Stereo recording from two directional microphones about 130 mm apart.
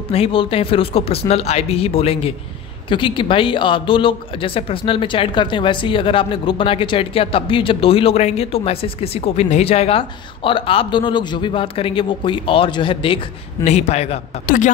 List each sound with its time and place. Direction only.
0.1 s speech: 45° left (ahead or behind)
13.7 s a man's voice: 55° left (ahead or behind)